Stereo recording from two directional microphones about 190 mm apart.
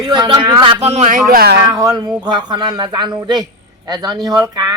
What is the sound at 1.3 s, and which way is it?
Speech, 55° right (ahead or behind).